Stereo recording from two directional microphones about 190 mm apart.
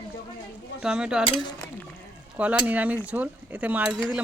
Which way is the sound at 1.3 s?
25° left (ahead or behind).